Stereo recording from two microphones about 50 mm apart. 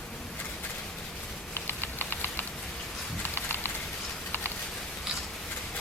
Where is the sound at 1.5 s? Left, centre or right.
Left.